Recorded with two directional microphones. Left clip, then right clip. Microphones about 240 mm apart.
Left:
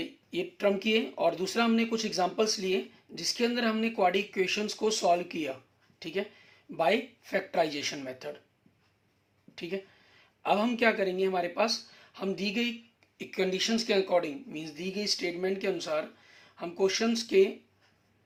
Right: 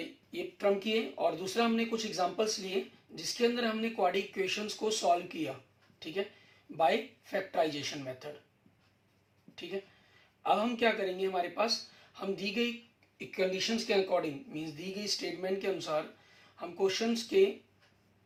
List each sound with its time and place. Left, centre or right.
0.3 s speech: left
9.6 s speech: left